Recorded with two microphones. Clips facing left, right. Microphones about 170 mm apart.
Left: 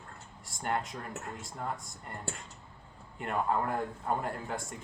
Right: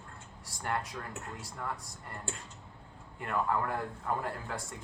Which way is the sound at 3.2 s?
20° left (ahead or behind).